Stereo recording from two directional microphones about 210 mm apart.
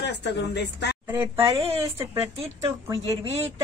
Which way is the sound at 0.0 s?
55° left (ahead or behind).